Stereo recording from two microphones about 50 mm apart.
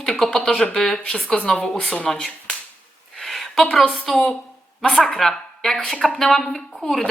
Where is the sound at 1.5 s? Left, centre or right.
Centre.